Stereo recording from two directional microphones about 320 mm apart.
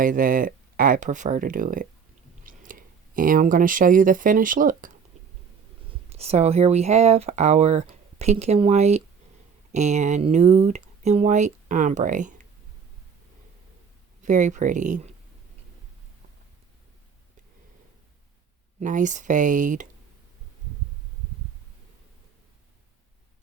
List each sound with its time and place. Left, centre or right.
0.0 s speech: right
6.1 s speech: centre
14.2 s speech: right
18.8 s speech: right